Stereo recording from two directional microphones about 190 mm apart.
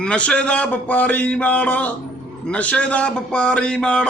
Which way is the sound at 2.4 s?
5° left (ahead or behind).